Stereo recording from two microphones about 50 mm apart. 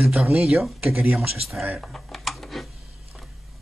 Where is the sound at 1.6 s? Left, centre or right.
Centre.